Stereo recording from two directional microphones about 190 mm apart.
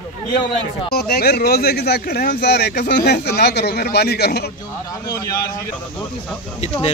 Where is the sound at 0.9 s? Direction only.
55° left (ahead or behind).